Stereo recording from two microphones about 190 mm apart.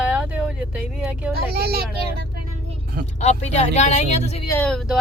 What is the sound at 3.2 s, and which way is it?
Speech, 35° left (ahead or behind).